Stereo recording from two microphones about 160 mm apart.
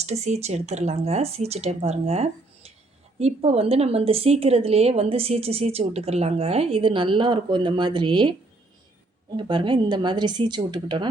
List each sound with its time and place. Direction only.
0.0 s a woman's voice: 45° right (ahead or behind)